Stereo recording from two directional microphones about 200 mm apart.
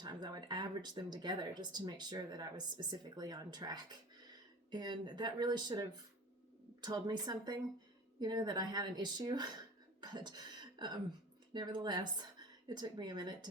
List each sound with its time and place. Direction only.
0.0 s speech: 20° right (ahead or behind)
10.0 s a sound: 20° right (ahead or behind)
11.5 s speech: 20° right (ahead or behind)